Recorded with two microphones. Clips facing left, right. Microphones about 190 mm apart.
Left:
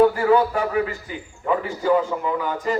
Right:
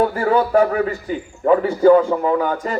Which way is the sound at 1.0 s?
45° right (ahead or behind).